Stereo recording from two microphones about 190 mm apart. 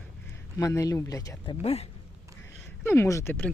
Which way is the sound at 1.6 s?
30° left (ahead or behind).